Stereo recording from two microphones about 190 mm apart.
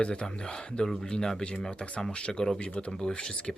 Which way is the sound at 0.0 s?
5° left (ahead or behind).